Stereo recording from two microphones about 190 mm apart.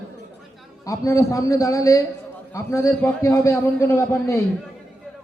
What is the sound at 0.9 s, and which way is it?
A man's voice, 15° left (ahead or behind).